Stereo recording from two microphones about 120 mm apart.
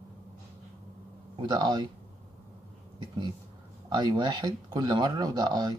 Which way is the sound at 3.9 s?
40° right (ahead or behind).